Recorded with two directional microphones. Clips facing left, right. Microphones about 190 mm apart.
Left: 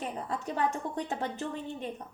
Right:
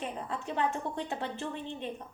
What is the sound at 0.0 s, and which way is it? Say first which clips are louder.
A woman's voice: left 2 dB; 40° left (ahead or behind).